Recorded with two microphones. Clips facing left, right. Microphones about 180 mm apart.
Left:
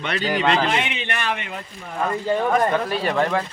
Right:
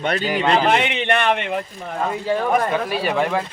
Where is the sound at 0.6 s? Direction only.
60° right (ahead or behind).